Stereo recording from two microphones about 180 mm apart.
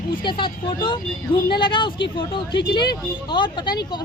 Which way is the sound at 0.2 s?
25° left (ahead or behind).